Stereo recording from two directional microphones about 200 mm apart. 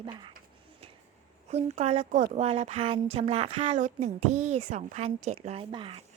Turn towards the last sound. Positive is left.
turn(degrees=-25)  # may be behind; listen again after turning